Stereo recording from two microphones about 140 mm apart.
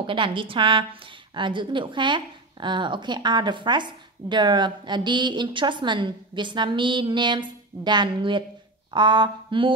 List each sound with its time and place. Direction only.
0.0 s speech: 35° right (ahead or behind)